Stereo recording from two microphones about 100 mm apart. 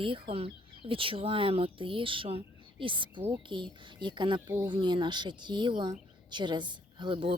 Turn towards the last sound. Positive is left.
turn(degrees=-55)  # may be behind; listen again after turning